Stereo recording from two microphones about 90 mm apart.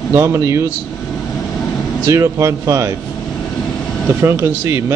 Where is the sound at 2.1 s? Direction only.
35° right (ahead or behind).